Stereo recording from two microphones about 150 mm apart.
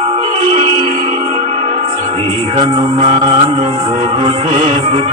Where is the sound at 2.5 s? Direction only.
35° right (ahead or behind).